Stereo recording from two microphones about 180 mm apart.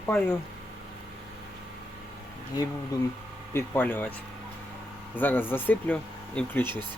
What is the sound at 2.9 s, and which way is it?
Speech, 20° left (ahead or behind).